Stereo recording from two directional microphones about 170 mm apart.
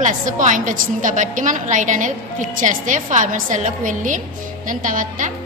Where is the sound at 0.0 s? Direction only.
45° right (ahead or behind).